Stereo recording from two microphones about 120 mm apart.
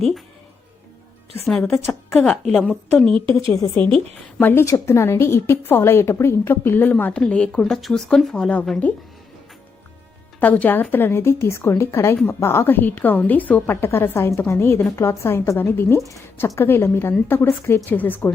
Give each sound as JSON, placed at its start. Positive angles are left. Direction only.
{"t": 1.5, "sound": "speech", "side_deg": 5}
{"t": 3.2, "sound": "speech", "side_deg": -45}
{"t": 3.8, "sound": "a woman's voice", "side_deg": 10}
{"t": 4.4, "sound": "a woman's voice", "side_deg": 25}
{"t": 10.4, "sound": "a woman's voice", "side_deg": 15}